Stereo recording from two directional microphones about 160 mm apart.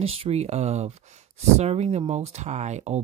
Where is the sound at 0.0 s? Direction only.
35° right (ahead or behind).